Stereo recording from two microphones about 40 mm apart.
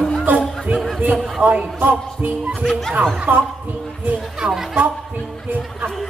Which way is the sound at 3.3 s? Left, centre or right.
Right.